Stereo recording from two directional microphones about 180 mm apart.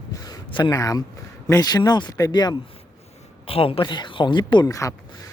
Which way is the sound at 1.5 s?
20° left (ahead or behind).